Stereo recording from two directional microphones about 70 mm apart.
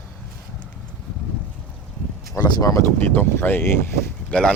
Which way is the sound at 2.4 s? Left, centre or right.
Left.